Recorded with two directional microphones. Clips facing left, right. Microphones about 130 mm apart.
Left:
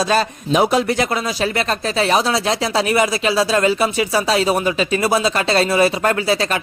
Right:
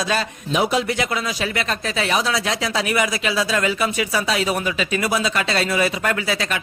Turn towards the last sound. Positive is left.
turn(degrees=35)  # may be behind; listen again after turning